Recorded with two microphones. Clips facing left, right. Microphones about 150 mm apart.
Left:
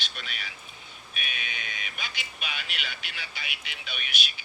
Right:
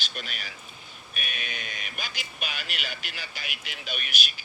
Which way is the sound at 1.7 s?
50° right (ahead or behind).